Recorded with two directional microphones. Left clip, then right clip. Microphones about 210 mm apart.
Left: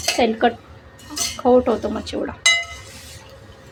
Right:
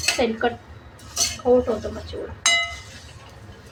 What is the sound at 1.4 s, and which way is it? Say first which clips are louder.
Speech: left 3 dB; 50° left (ahead or behind).